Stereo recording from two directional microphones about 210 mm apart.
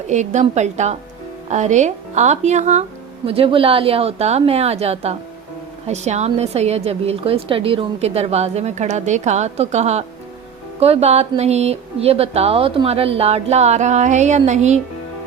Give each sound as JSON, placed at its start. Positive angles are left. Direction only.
{"t": 0.1, "sound": "a woman's voice", "side_deg": -35}